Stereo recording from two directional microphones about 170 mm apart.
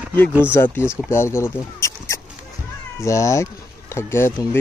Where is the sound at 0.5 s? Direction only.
15° left (ahead or behind).